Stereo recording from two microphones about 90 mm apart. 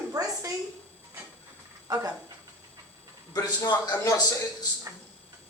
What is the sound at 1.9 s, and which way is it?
Speech, 45° right (ahead or behind).